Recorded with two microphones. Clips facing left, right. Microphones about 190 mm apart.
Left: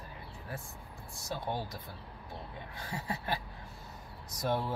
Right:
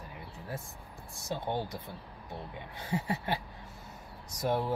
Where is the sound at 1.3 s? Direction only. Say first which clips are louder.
Right 3 dB; 20° right (ahead or behind).